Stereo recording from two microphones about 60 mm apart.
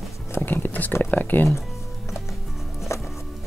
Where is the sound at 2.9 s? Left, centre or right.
Left.